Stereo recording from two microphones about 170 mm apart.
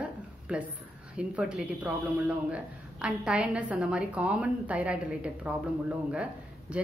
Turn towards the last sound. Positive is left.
turn(degrees=-5)  # may be behind; listen again after turning